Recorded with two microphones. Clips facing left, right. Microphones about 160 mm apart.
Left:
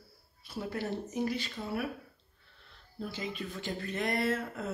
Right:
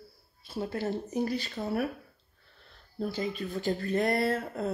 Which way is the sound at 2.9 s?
40° right (ahead or behind).